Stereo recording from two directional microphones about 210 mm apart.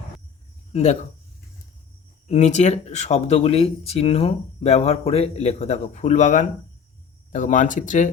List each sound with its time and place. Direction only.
0.7 s speech: 30° left (ahead or behind)
2.2 s speech: 35° left (ahead or behind)